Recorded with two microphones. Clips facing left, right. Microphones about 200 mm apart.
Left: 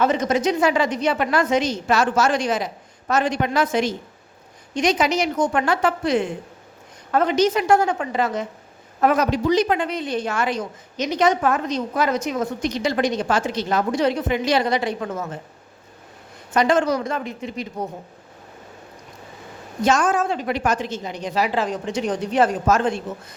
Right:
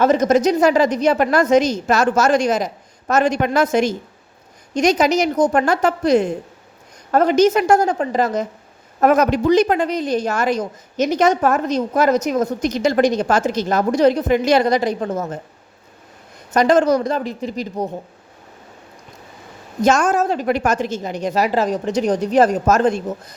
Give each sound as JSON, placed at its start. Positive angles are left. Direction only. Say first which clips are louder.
{"t": 0.0, "sound": "a woman's voice", "louder": "right 5 dB", "side_deg": -45}
{"t": 16.5, "sound": "a woman's voice", "louder": "right 4 dB", "side_deg": -40}
{"t": 19.8, "sound": "a woman's voice", "louder": "right 3 dB", "side_deg": -45}